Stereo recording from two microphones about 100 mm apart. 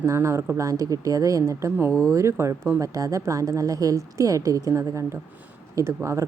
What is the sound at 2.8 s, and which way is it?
A woman's voice, 35° right (ahead or behind).